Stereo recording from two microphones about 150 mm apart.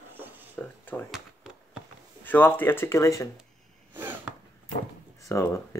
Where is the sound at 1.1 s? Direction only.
5° right (ahead or behind).